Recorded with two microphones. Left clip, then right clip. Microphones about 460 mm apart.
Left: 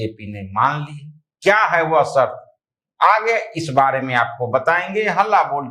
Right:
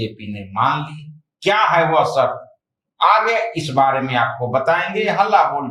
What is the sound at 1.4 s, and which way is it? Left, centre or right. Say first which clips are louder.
Speech: even; left.